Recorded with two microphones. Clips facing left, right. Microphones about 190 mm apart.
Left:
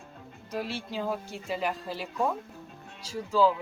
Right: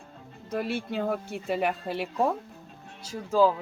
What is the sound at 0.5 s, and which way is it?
Speech, 55° right (ahead or behind).